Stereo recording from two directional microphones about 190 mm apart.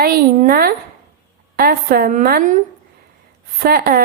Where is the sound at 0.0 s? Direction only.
50° right (ahead or behind).